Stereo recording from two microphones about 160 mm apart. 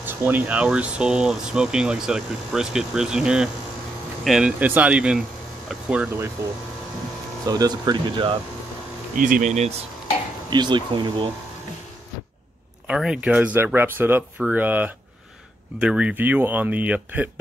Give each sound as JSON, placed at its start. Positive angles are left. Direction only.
{"t": 0.0, "sound": "speech", "side_deg": -10}
{"t": 7.4, "sound": "speech", "side_deg": -25}
{"t": 9.1, "sound": "speech", "side_deg": -55}
{"t": 10.5, "sound": "speech", "side_deg": -30}
{"t": 12.8, "sound": "speech", "side_deg": -5}